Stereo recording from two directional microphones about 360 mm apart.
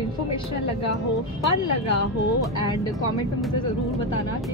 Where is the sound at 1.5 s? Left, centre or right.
Left.